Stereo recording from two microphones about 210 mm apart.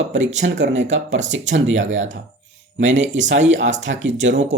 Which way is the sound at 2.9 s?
65° right (ahead or behind).